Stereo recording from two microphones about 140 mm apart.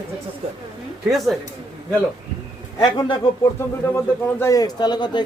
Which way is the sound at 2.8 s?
30° left (ahead or behind).